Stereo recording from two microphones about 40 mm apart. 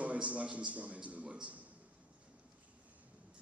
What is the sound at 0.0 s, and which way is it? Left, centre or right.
A man's voice, right.